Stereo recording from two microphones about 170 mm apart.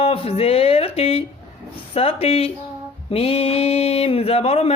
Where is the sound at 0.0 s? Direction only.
35° left (ahead or behind).